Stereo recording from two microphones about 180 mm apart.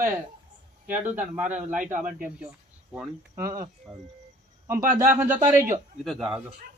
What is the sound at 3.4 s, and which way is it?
Speech, 50° right (ahead or behind).